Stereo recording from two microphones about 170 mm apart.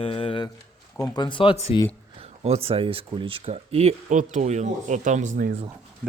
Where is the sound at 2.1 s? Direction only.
35° right (ahead or behind).